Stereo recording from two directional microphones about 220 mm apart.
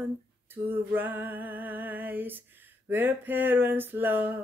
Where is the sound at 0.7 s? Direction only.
10° right (ahead or behind).